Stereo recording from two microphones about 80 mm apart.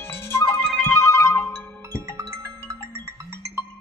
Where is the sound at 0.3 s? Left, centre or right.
Left.